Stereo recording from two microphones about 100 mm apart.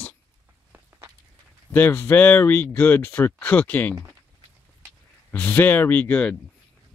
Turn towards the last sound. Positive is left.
turn(degrees=15)  # may be behind; listen again after turning